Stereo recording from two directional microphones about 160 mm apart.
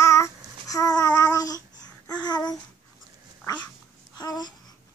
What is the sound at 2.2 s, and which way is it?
Babbling, 25° left (ahead or behind).